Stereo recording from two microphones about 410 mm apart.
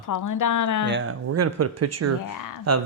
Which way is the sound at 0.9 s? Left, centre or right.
Right.